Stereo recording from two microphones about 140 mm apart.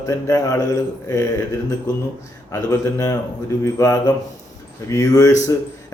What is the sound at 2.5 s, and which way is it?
A man's voice, 25° left (ahead or behind).